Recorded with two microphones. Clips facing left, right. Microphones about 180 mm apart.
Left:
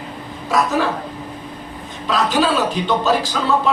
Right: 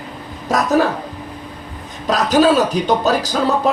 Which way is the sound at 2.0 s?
40° right (ahead or behind).